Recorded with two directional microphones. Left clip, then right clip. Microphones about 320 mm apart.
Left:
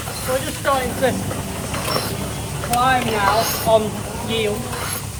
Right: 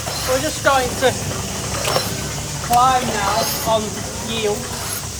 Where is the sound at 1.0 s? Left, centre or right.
Right.